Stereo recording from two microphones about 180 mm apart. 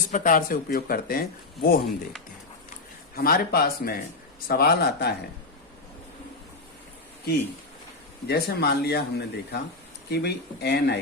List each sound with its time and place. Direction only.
0.1 s speech: 50° left (ahead or behind)
3.2 s speech: 55° left (ahead or behind)
8.3 s speech: 60° left (ahead or behind)